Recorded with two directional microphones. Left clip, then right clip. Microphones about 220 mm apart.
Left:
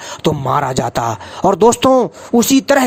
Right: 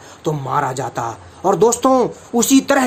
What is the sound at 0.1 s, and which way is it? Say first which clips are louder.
Speech: left 4 dB; 40° left (ahead or behind).